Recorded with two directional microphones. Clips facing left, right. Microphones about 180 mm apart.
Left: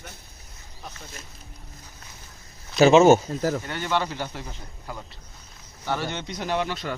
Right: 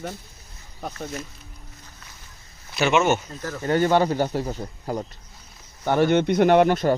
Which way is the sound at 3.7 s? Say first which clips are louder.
Right 8 dB; 45° right (ahead or behind).